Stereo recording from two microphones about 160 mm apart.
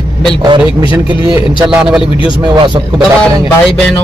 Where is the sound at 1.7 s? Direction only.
5° right (ahead or behind).